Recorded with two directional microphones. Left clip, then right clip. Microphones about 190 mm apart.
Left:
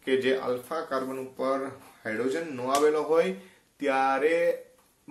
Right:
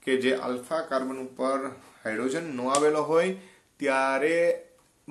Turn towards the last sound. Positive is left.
turn(degrees=-25)  # may be behind; listen again after turning